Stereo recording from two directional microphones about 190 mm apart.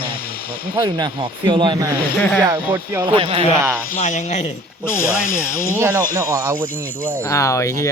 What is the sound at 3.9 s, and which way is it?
Speech, 40° left (ahead or behind).